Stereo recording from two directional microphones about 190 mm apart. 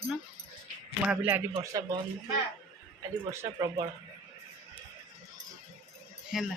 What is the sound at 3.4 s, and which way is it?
Speech, 15° right (ahead or behind).